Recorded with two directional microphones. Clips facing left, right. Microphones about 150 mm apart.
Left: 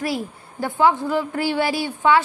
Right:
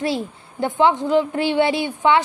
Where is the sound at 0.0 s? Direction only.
25° right (ahead or behind).